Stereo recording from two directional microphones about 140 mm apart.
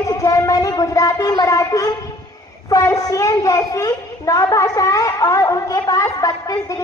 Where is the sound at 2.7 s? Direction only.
25° left (ahead or behind).